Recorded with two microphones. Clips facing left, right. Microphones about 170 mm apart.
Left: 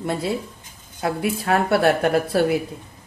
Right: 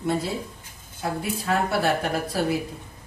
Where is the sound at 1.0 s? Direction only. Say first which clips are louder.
Left 5 dB; 65° left (ahead or behind).